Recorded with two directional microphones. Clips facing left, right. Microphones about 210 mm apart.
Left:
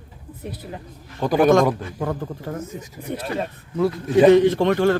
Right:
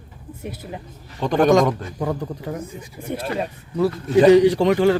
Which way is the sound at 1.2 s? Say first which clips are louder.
Left 1 dB; 5° left (ahead or behind).